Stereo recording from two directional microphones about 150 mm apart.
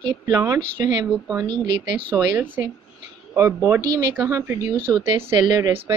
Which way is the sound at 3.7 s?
30° right (ahead or behind).